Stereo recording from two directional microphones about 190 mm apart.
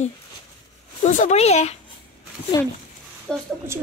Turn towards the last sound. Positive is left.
turn(degrees=-15)  # may be behind; listen again after turning